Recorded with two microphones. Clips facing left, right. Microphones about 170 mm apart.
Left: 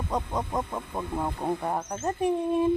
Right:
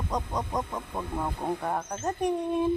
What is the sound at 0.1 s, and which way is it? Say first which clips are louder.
Speech: left 2 dB; 5° left (ahead or behind).